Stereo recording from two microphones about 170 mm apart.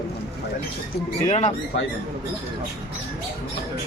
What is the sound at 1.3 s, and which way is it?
Speech, 40° left (ahead or behind).